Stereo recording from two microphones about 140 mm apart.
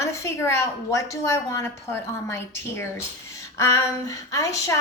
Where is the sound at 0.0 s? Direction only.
20° left (ahead or behind).